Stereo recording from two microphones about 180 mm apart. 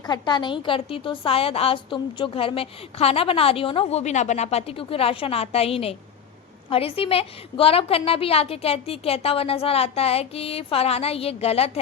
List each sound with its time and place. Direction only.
0.0 s a woman's voice: 25° left (ahead or behind)